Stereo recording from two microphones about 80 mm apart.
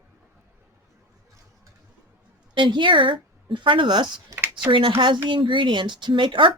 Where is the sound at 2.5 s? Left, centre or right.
Right.